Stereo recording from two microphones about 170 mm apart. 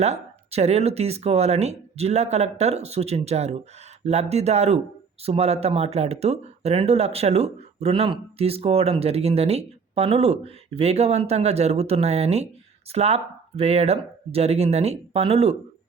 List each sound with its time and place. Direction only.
0.0 s speech: 40° right (ahead or behind)